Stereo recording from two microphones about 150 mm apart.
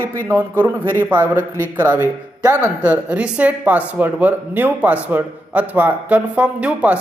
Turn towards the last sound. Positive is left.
turn(degrees=-10)  # may be behind; listen again after turning